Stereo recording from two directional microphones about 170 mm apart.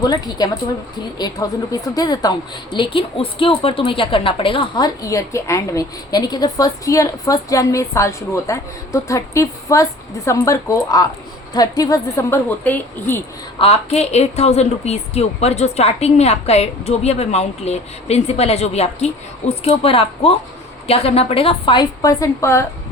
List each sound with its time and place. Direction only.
0.0 s a woman's voice: 25° left (ahead or behind)
13.6 s a woman's voice: 35° left (ahead or behind); by 22.6 s 15° left (ahead or behind)